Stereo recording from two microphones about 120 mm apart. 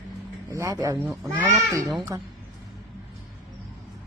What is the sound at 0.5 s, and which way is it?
A child's voice, 30° right (ahead or behind).